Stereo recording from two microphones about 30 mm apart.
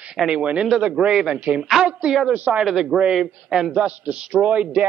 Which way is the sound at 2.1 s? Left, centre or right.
Right.